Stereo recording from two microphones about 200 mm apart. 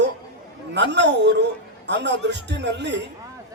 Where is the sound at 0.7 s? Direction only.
60° right (ahead or behind).